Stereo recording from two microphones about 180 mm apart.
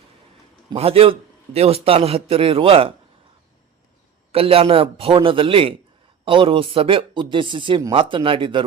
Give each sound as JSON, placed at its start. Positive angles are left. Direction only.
{"t": 0.8, "sound": "a man's voice", "side_deg": -35}
{"t": 4.3, "sound": "a man's voice", "side_deg": -30}